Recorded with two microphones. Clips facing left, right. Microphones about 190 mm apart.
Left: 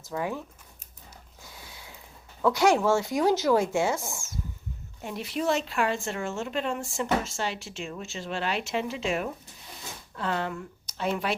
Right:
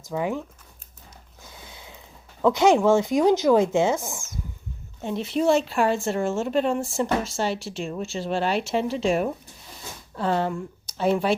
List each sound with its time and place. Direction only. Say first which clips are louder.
0.0 s speech: right 4 dB; 15° right (ahead or behind)
1.5 s a sound: right 3 dB; 20° right (ahead or behind)
2.4 s speech: right 4 dB; 20° right (ahead or behind)